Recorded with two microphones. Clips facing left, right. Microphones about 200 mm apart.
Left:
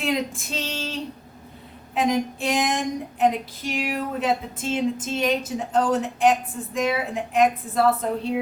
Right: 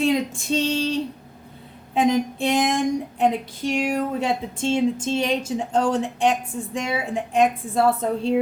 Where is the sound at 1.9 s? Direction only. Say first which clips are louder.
Right 3 dB; 30° right (ahead or behind).